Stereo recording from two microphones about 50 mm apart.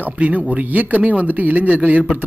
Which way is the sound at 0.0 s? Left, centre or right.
Right.